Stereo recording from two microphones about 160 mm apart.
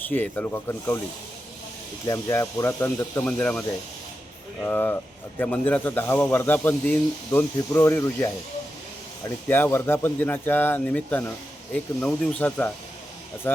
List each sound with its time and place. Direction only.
0.0 s speech: 10° left (ahead or behind)
2.0 s speech: 20° left (ahead or behind)
4.6 s speech: 10° left (ahead or behind)
9.5 s speech: 10° left (ahead or behind)